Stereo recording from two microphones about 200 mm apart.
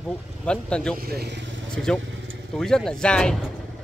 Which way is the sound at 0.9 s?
50° right (ahead or behind).